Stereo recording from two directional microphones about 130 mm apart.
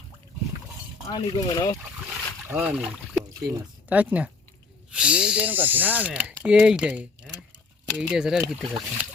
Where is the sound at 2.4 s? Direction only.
10° right (ahead or behind).